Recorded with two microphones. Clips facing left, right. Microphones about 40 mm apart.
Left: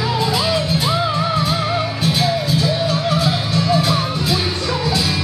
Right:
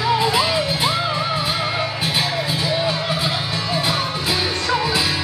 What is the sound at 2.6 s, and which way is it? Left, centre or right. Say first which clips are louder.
Music: left 2 dB; centre.